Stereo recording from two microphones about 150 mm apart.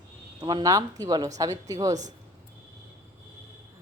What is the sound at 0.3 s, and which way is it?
Speech, 25° right (ahead or behind).